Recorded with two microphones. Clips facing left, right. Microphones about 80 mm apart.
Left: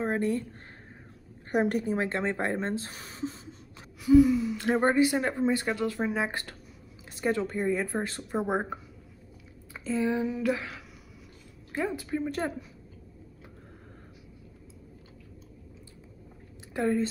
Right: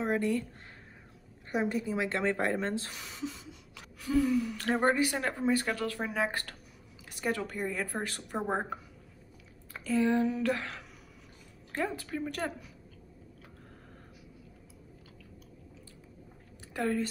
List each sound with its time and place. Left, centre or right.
0.0 s speech: left
1.5 s a woman's voice: left
2.0 s speech: left
4.0 s speech: centre
9.8 s speech: centre
16.7 s speech: left